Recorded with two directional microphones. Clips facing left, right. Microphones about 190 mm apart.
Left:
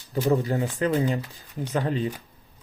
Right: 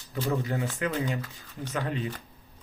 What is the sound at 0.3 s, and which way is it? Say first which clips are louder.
Speech: left 6 dB; 35° left (ahead or behind).